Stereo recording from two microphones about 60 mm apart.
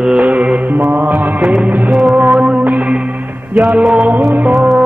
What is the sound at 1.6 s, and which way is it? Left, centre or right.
Music, right.